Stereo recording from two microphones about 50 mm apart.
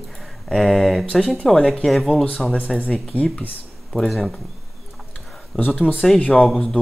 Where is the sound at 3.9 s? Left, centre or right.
Centre.